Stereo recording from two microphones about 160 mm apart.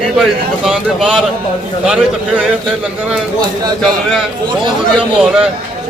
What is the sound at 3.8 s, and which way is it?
Speech, centre (ahead or behind).